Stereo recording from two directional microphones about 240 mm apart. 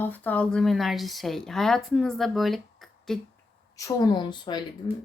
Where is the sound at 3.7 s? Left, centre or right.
Centre.